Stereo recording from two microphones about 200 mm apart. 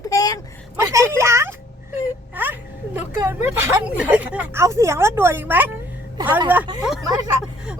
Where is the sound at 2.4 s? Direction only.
10° right (ahead or behind).